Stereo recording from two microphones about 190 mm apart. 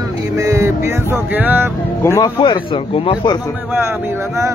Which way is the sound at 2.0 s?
20° left (ahead or behind).